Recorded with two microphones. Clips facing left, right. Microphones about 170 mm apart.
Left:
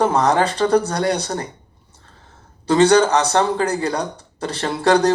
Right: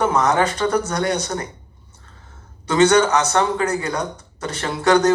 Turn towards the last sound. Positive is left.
turn(degrees=30)  # may be behind; listen again after turning